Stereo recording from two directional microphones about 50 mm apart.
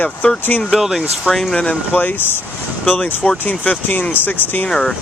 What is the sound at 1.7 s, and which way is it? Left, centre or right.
Speech, left.